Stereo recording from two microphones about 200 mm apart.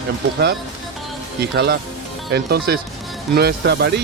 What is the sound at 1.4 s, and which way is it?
Speech, 55° right (ahead or behind).